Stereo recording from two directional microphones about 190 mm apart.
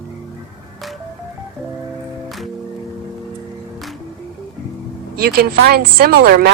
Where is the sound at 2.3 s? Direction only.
Centre (ahead or behind).